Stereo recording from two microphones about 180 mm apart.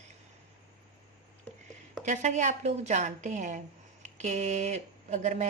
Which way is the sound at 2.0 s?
40° right (ahead or behind).